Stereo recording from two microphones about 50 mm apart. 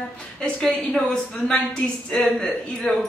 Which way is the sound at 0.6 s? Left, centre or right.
Centre.